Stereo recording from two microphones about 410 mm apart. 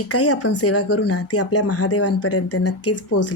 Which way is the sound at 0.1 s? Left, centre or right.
Left.